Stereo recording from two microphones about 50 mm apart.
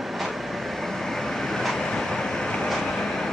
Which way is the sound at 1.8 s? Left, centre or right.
Centre.